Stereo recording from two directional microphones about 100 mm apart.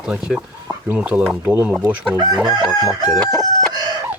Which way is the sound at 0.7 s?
15° right (ahead or behind).